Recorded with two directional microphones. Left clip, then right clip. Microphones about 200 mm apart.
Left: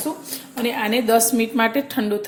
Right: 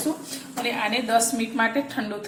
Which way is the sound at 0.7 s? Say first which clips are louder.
Left 4 dB; 50° left (ahead or behind).